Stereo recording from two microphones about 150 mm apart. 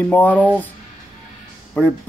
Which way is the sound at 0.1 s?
10° left (ahead or behind).